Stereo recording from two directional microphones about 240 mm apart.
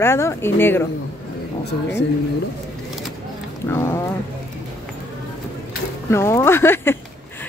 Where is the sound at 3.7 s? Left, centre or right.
Centre.